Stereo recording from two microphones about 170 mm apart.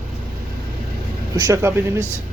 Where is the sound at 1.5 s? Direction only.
15° right (ahead or behind).